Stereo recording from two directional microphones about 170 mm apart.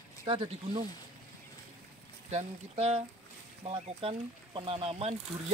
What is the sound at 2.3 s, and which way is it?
Speech, 40° right (ahead or behind).